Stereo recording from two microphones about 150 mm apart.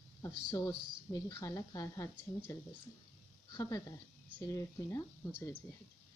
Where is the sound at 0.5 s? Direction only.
30° left (ahead or behind).